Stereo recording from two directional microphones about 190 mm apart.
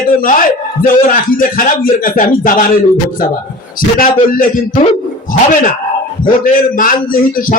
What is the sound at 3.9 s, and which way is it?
Speech, 50° left (ahead or behind).